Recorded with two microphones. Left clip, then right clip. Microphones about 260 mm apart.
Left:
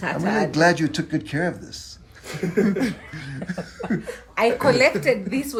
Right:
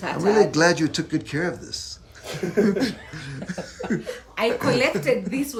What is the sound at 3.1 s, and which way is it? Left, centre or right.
Beatboxing, centre.